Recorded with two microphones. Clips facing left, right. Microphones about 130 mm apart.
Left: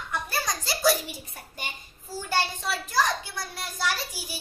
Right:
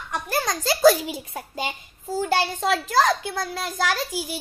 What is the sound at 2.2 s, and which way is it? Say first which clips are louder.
A child's voice: right 6 dB; 90° right.